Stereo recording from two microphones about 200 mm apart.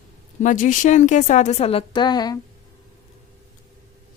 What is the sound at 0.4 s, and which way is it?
A woman's voice, 40° left (ahead or behind).